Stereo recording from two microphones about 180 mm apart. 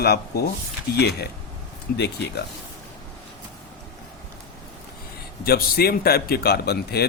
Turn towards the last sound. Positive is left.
turn(degrees=60)  # may be behind; listen again after turning